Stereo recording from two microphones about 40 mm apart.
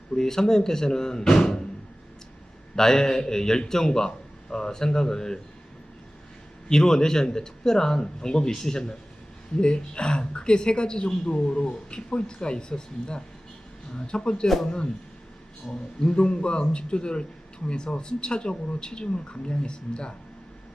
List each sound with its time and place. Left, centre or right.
0.2 s a man's voice: centre
2.7 s a man's voice: centre
6.7 s a man's voice: centre
16.0 s speech: left